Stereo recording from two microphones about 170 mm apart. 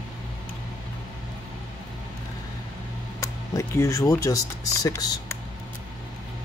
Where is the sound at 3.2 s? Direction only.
15° left (ahead or behind).